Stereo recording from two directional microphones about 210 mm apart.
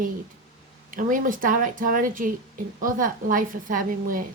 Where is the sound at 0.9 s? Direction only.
40° right (ahead or behind).